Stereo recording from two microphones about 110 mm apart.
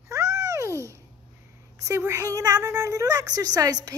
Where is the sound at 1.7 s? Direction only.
25° right (ahead or behind).